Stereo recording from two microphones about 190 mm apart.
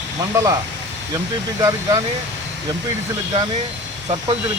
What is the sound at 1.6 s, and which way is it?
Speech, 15° right (ahead or behind).